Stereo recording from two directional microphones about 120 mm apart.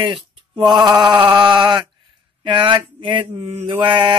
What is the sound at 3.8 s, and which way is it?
Mantra, 40° right (ahead or behind).